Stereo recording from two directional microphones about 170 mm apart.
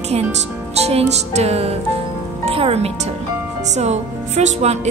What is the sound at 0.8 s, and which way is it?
A woman's voice, 40° right (ahead or behind).